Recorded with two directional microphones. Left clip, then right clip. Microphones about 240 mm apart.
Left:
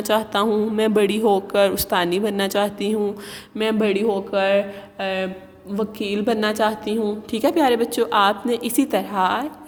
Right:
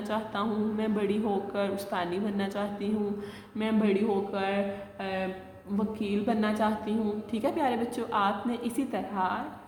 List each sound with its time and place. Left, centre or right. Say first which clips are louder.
0.1 s a woman's voice: left 13 dB; left